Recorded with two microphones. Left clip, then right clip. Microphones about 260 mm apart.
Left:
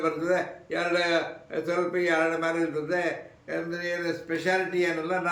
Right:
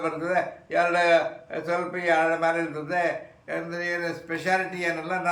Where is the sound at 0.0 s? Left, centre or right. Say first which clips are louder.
Even; centre.